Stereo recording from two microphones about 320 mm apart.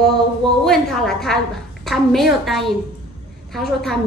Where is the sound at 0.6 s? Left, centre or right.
Centre.